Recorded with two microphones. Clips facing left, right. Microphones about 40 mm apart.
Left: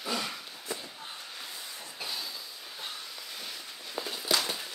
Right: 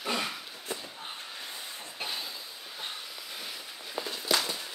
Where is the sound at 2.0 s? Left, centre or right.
Right.